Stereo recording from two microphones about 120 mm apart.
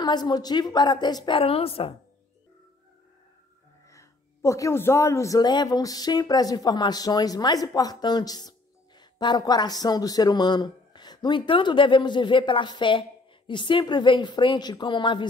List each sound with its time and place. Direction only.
0.0 s a man's voice: 35° left (ahead or behind)
1.4 s a woman's voice: 55° left (ahead or behind)
3.9 s a man's voice: 25° left (ahead or behind); by 15.2 s 40° left (ahead or behind)